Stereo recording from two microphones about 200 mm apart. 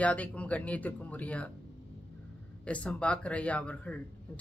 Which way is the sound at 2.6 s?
5° left (ahead or behind).